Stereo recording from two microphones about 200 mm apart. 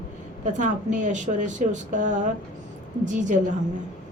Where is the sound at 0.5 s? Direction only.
40° right (ahead or behind).